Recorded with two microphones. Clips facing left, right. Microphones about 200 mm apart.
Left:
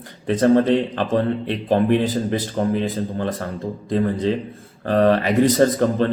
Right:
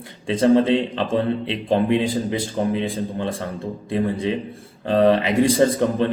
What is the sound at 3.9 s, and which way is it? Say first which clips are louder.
A man's voice: left 2 dB; 15° right (ahead or behind).